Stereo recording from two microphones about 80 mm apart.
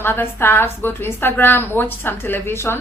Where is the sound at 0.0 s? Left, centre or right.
Left.